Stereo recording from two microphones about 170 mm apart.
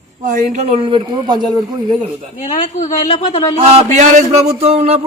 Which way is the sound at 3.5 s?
40° right (ahead or behind).